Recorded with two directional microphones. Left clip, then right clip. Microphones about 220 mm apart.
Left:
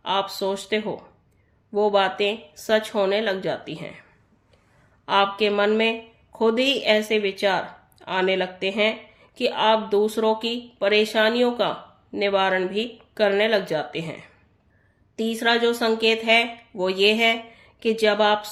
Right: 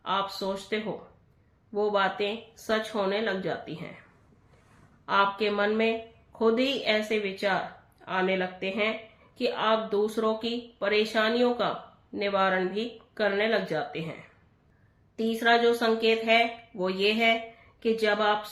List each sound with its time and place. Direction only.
0.0 s speech: 45° left (ahead or behind)
5.0 s speech: 45° left (ahead or behind)